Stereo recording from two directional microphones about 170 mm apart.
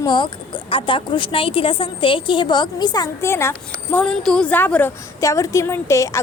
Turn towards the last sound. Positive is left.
turn(degrees=15)  # may be behind; listen again after turning